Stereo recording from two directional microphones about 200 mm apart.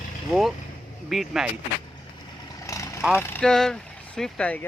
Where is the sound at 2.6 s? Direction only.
15° left (ahead or behind).